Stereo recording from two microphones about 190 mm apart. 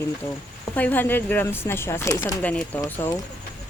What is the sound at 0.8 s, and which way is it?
Speech, 10° left (ahead or behind).